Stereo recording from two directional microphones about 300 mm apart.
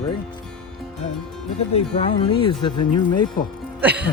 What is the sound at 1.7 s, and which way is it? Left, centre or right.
Speech, centre.